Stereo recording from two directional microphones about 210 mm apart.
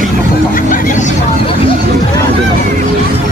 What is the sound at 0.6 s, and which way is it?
Vehicle, 40° left (ahead or behind).